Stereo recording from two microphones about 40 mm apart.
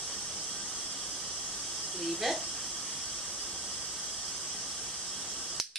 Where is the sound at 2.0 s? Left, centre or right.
Centre.